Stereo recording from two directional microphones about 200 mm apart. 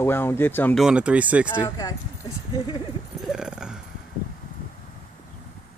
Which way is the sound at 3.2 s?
5° right (ahead or behind).